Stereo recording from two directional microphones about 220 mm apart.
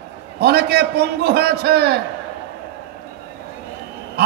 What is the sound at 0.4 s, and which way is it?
A man's voice, 50° right (ahead or behind).